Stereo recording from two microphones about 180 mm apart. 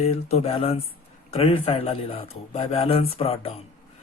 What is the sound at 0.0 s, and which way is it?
Speech, 35° left (ahead or behind).